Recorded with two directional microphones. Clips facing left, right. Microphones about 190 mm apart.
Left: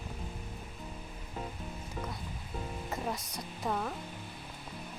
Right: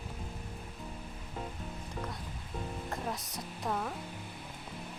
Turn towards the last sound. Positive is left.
turn(degrees=0)  # may be behind; listen again after turning